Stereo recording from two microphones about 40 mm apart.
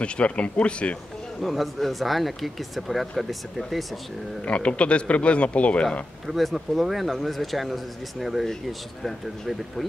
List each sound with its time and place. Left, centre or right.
0.0 s speech: left
1.4 s speech: centre
4.5 s a man's voice: left
6.2 s speech: centre